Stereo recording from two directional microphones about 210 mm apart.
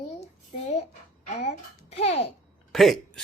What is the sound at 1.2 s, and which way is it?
Babbling, 30° left (ahead or behind).